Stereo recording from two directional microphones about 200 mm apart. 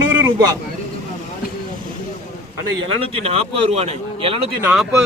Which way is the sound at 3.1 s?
30° right (ahead or behind).